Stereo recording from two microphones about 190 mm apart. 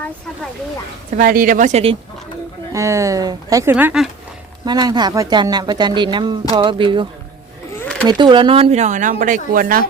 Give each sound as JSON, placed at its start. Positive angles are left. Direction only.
{"t": 1.1, "sound": "speech", "side_deg": -50}
{"t": 2.7, "sound": "speech", "side_deg": -15}
{"t": 4.6, "sound": "speech", "side_deg": -20}